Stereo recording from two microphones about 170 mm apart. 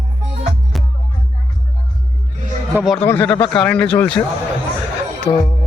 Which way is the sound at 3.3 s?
30° left (ahead or behind).